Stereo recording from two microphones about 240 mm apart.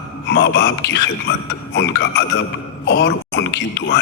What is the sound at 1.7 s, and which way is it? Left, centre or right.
A man's voice, left.